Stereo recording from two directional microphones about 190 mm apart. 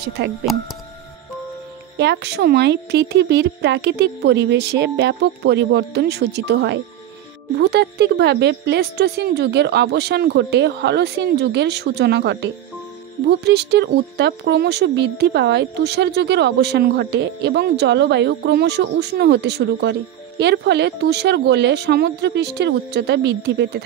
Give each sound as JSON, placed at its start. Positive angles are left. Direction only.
{"t": 0.2, "sound": "speech", "side_deg": -65}
{"t": 2.0, "sound": "speech", "side_deg": -65}